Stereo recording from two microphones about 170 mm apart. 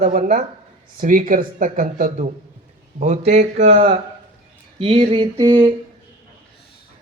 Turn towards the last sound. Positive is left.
turn(degrees=-30)  # may be behind; listen again after turning